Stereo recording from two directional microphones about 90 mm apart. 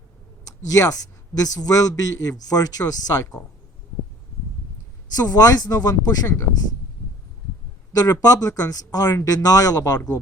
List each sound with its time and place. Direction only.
0.7 s speech: 40° left (ahead or behind)
5.1 s speech: 45° left (ahead or behind)
6.2 s speech: 30° left (ahead or behind)
7.9 s speech: 45° left (ahead or behind)